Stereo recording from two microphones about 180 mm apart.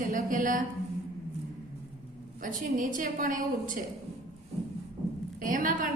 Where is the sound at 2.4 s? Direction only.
45° right (ahead or behind).